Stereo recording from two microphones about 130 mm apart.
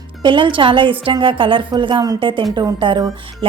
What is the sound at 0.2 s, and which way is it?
A woman's voice, 40° right (ahead or behind).